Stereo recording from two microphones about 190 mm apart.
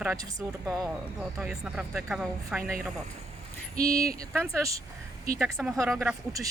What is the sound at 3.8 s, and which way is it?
Speech, 15° right (ahead or behind).